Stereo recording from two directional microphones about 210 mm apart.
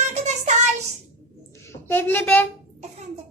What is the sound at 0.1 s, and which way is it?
Child singing, 35° right (ahead or behind).